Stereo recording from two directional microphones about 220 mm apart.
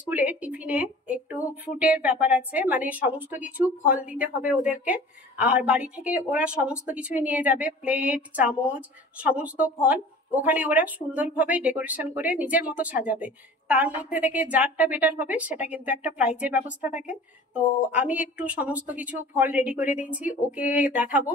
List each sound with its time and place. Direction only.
0.1 s a woman's voice: 5° right (ahead or behind)